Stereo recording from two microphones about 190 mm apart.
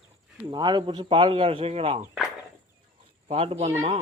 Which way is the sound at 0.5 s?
25° right (ahead or behind).